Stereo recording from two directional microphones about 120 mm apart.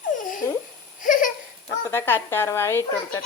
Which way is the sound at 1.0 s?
90° left.